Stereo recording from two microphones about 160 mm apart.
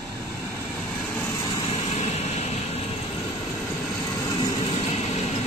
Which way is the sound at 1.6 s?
40° left (ahead or behind).